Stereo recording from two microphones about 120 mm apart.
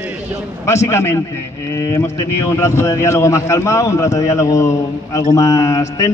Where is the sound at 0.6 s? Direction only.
25° left (ahead or behind).